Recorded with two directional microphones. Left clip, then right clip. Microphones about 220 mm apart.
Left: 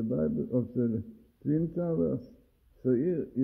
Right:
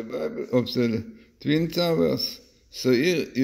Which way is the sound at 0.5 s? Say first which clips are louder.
Right 7 dB; 20° right (ahead or behind).